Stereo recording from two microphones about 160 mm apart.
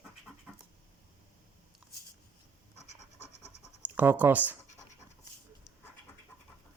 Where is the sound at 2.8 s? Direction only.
45° left (ahead or behind).